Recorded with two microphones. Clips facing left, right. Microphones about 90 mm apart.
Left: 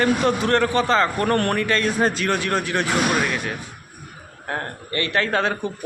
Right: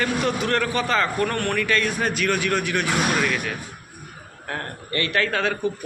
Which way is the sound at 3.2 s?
20° left (ahead or behind).